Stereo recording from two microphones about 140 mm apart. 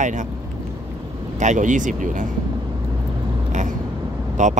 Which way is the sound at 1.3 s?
60° right (ahead or behind).